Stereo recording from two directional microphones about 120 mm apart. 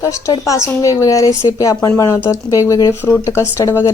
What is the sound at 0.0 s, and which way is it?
Speech, 25° left (ahead or behind).